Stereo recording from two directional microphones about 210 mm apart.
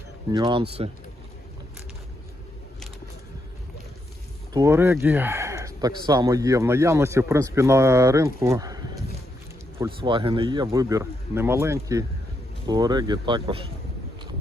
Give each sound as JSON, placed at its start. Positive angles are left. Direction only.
{"t": 0.3, "sound": "speech", "side_deg": -25}
{"t": 4.5, "sound": "speech", "side_deg": -15}